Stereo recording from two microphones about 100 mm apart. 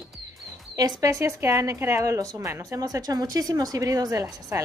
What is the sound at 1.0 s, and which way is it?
A woman's voice, 30° right (ahead or behind).